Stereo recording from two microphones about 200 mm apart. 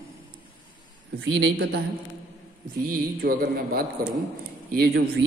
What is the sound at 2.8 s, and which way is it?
Speech, 50° right (ahead or behind).